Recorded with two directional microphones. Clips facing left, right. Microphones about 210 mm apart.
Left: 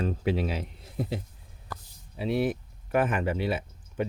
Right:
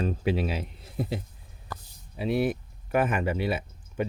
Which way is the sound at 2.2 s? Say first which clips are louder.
Right 1 dB; 10° right (ahead or behind).